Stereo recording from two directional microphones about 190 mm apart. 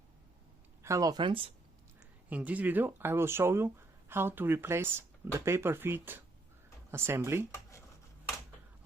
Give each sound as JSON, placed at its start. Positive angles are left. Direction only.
{"t": 0.8, "sound": "speech", "side_deg": -15}
{"t": 2.0, "sound": "speech", "side_deg": -5}